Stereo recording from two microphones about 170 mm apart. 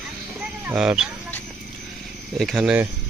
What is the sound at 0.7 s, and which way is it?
Speech, 5° right (ahead or behind).